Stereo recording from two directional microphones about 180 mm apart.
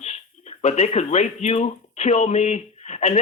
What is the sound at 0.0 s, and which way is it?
Speech, 40° left (ahead or behind).